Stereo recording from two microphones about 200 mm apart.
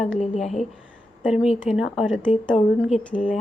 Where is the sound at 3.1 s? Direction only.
5° left (ahead or behind).